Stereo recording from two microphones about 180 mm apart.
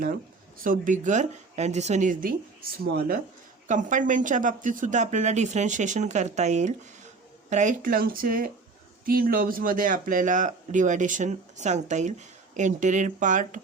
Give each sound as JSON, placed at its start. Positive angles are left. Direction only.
{"t": 0.6, "sound": "speech", "side_deg": -45}
{"t": 3.7, "sound": "speech", "side_deg": -45}